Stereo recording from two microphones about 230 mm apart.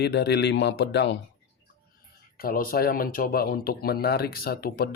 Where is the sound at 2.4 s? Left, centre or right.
Left.